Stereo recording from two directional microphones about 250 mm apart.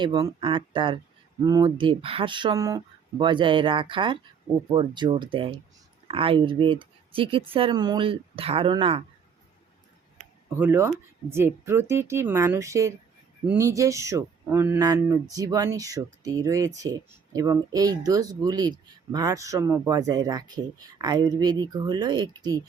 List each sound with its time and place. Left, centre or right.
0.0 s speech: centre
10.5 s speech: centre